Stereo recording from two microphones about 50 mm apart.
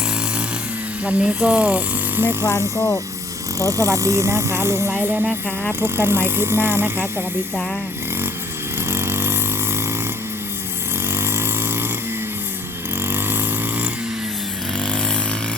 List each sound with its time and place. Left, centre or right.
1.0 s speech: right
2.1 s speech: right
3.6 s speech: right
8.9 s vehicle: right
11.1 s a sound: right
13.1 s vehicle: right